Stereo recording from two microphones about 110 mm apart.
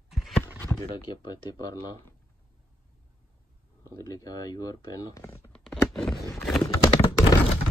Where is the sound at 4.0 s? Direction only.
30° left (ahead or behind).